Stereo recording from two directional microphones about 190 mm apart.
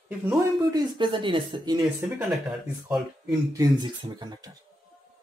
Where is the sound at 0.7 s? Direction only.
25° right (ahead or behind).